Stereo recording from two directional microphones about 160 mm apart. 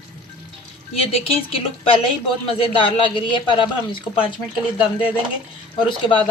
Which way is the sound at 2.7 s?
30° left (ahead or behind).